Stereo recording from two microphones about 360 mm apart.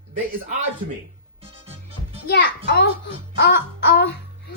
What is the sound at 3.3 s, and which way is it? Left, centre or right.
Child singing, left.